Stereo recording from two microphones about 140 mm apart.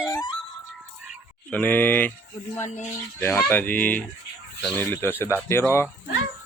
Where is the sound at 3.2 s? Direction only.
15° left (ahead or behind).